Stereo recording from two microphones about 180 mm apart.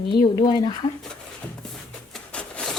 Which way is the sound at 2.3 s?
5° left (ahead or behind).